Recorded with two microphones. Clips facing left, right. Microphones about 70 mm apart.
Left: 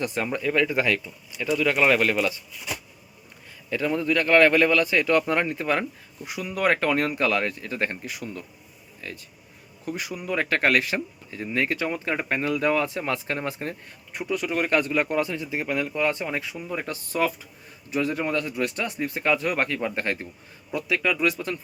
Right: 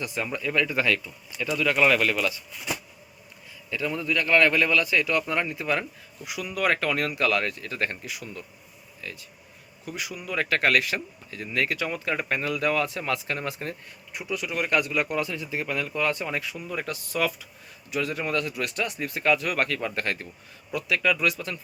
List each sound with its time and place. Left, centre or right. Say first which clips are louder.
0.0 s speech: left 4 dB; left
3.7 s speech: left 4 dB; left